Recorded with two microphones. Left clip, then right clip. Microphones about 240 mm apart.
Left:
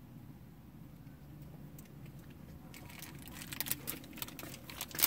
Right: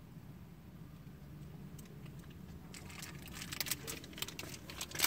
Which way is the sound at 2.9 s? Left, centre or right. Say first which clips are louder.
Right 2 dB; left.